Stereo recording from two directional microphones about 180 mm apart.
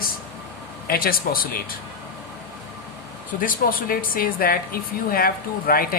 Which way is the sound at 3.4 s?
50° left (ahead or behind).